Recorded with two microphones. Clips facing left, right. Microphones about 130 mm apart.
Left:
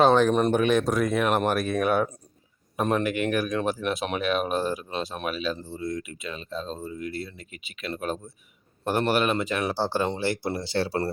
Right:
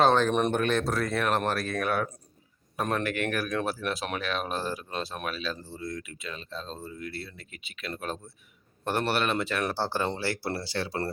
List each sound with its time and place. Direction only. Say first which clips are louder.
0.0 s speech: left 3 dB; 10° left (ahead or behind); by 11.1 s 30° left (ahead or behind)